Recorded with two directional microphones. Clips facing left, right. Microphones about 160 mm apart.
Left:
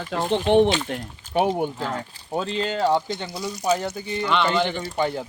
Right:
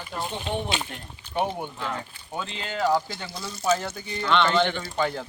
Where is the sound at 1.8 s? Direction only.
40° left (ahead or behind).